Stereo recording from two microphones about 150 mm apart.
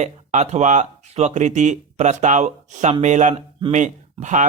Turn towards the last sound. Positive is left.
turn(degrees=-55)  # may be behind; listen again after turning